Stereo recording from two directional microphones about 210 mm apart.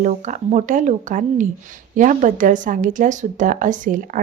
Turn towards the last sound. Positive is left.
turn(degrees=-40)  # may be behind; listen again after turning